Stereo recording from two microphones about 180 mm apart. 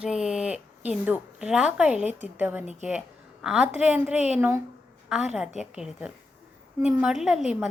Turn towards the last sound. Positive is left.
turn(degrees=-5)  # may be behind; listen again after turning